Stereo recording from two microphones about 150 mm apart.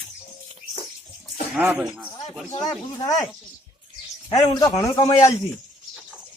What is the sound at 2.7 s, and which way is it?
Speech, 20° left (ahead or behind).